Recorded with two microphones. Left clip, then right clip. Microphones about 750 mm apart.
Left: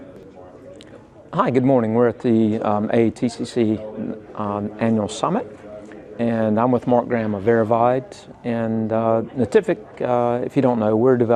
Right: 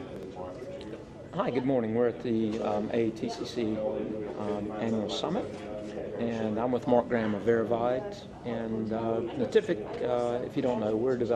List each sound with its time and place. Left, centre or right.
1.3 s speech: left